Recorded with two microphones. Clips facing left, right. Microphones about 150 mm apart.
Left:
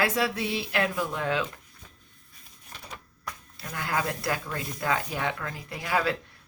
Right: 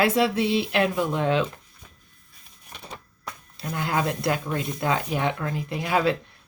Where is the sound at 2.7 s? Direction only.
25° right (ahead or behind).